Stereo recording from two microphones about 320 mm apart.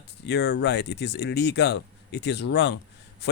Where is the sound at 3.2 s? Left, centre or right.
Left.